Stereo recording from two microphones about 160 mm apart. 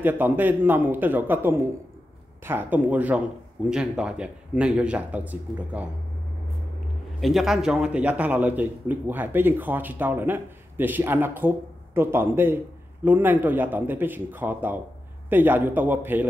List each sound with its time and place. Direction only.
0.0 s a man's voice: 10° right (ahead or behind)
7.2 s a man's voice: centre (ahead or behind)